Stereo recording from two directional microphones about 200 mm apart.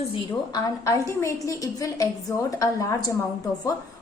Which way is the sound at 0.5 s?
15° left (ahead or behind).